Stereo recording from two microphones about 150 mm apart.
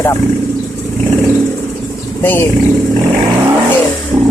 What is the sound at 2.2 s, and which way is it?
Speech, 15° left (ahead or behind).